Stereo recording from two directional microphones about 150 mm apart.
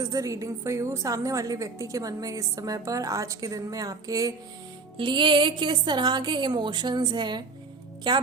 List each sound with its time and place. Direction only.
0.0 s a woman's voice: 20° right (ahead or behind)